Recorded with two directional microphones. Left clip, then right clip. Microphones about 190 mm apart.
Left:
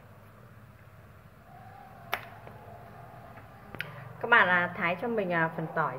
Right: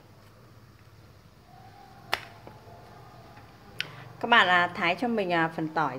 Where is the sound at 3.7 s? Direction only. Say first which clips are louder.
Right 3 dB; 45° right (ahead or behind).